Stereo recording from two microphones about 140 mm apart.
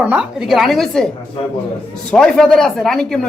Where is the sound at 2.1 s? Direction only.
5° left (ahead or behind).